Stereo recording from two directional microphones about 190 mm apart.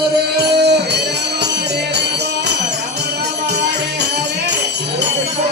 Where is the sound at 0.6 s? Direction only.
60° right (ahead or behind).